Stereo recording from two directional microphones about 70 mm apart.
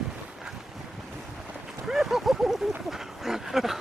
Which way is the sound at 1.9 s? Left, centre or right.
Centre.